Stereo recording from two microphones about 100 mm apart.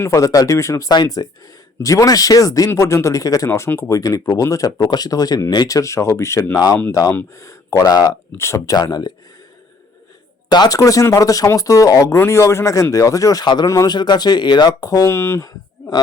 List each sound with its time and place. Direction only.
0.1 s speech: 35° left (ahead or behind)
8.4 s speech: 30° left (ahead or behind)
10.5 s speech: 45° left (ahead or behind)
10.8 s speech: 35° left (ahead or behind)
15.1 s speech: 25° left (ahead or behind)